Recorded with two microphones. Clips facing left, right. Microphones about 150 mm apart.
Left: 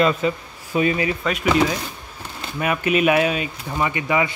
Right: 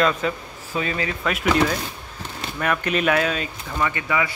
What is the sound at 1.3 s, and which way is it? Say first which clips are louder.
Speech: even; centre (ahead or behind).